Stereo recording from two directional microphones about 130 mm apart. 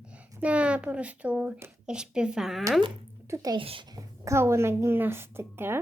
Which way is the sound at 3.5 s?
40° right (ahead or behind).